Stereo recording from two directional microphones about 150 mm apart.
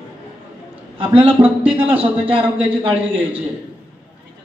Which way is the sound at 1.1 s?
10° right (ahead or behind).